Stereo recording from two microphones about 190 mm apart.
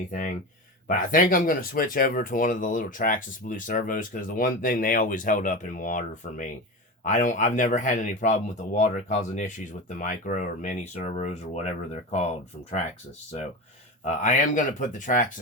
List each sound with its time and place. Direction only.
0.1 s speech: 45° left (ahead or behind)
14.0 s speech: 40° left (ahead or behind)